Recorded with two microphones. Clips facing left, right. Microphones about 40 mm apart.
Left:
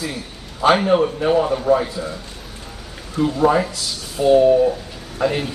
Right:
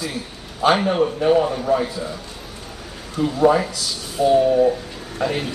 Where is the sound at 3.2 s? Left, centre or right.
Centre.